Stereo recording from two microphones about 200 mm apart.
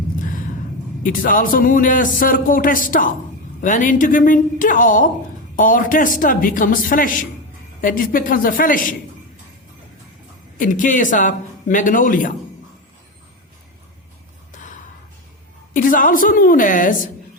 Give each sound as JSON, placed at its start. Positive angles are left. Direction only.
{"t": 1.0, "sound": "a man's voice", "side_deg": 45}
{"t": 10.6, "sound": "speech", "side_deg": 40}
{"t": 14.5, "sound": "gasp", "side_deg": 40}
{"t": 15.7, "sound": "a man's voice", "side_deg": 45}